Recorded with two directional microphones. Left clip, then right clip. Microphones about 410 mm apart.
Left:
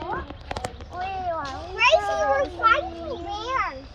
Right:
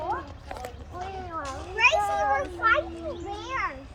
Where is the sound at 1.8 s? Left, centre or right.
Left.